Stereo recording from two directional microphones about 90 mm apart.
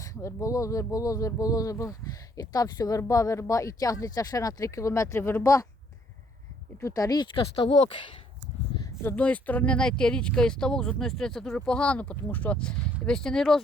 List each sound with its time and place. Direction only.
0.0 s speech: 35° left (ahead or behind)
6.8 s speech: 40° left (ahead or behind)
7.3 s speech: 85° left; by 7.9 s 65° left (ahead or behind)
9.1 s speech: 15° left (ahead or behind)